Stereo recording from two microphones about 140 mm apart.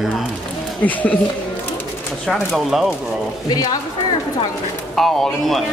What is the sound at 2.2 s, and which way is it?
Speech, centre (ahead or behind).